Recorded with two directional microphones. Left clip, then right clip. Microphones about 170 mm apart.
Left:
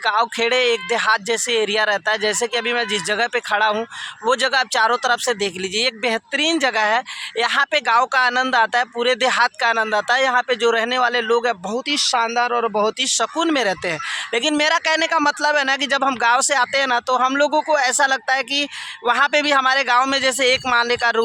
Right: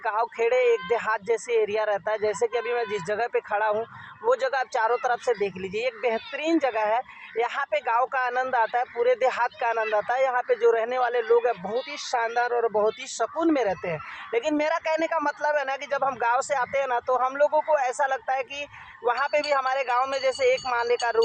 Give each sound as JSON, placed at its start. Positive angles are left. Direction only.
{"t": 0.0, "sound": "speech", "side_deg": 25}
{"t": 14.3, "sound": "speech", "side_deg": 25}